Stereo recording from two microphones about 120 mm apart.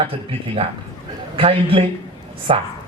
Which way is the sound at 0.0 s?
50° right (ahead or behind).